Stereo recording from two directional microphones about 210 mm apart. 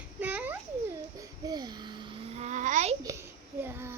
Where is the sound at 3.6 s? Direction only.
10° right (ahead or behind).